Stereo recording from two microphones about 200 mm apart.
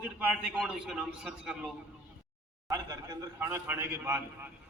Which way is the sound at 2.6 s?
20° right (ahead or behind).